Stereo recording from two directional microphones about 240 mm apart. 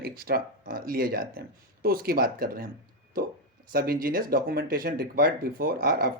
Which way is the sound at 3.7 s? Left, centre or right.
Right.